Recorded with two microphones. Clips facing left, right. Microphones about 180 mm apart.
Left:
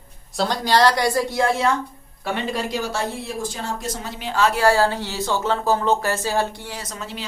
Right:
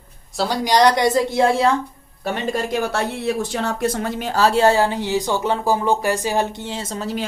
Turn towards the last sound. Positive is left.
turn(degrees=-30)  # may be behind; listen again after turning